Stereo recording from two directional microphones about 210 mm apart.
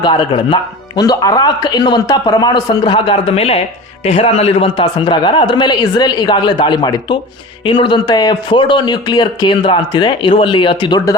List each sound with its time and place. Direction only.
0.0 s speech: 20° left (ahead or behind)